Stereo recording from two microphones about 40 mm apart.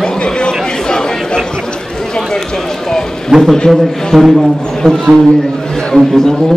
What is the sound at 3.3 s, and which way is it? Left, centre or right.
A man's voice, centre.